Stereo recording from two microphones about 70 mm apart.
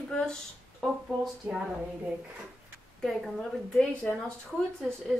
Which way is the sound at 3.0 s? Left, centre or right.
Centre.